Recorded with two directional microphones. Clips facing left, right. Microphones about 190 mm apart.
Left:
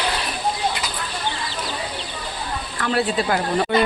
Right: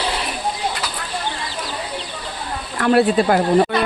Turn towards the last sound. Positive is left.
turn(degrees=-45)  # may be behind; listen again after turning